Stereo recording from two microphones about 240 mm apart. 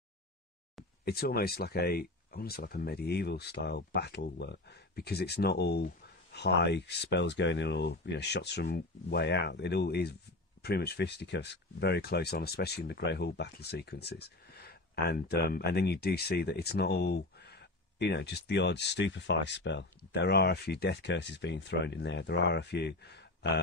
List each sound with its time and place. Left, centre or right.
1.0 s speech: left